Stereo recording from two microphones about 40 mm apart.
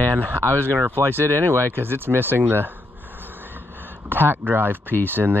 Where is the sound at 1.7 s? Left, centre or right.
Right.